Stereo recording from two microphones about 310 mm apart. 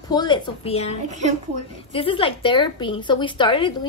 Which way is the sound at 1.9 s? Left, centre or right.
Centre.